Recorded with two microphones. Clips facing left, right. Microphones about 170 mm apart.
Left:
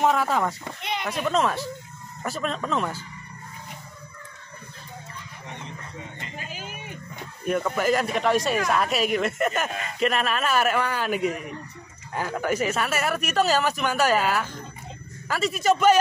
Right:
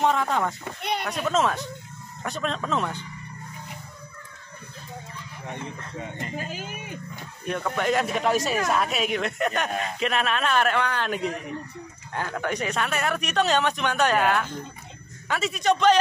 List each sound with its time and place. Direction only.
0.0 s speech: 5° left (ahead or behind)
6.1 s speech: 45° right (ahead or behind)
7.4 s speech: 5° left (ahead or behind)